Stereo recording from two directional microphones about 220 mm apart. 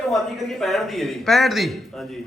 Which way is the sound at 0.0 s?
Centre (ahead or behind).